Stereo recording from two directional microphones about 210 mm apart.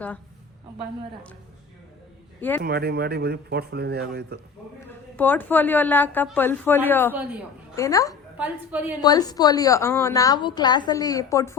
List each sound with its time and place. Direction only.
2.6 s speech: 45° right (ahead or behind)
5.1 s a woman's voice: 10° left (ahead or behind)
8.4 s a woman's voice: 10° right (ahead or behind)
9.0 s a woman's voice: 20° left (ahead or behind)